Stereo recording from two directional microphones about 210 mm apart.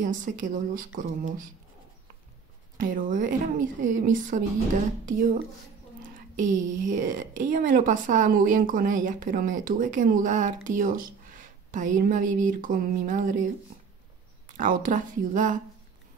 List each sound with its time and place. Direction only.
0.0 s a woman's voice: 40° right (ahead or behind)
2.8 s a woman's voice: 40° right (ahead or behind)
14.6 s a woman's voice: 40° right (ahead or behind)